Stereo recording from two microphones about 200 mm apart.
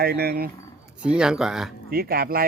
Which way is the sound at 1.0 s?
5° right (ahead or behind).